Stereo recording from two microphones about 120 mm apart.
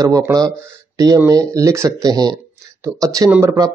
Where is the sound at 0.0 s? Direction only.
30° right (ahead or behind).